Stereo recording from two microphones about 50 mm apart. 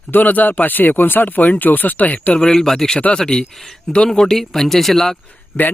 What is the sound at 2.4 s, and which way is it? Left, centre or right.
Speech, centre.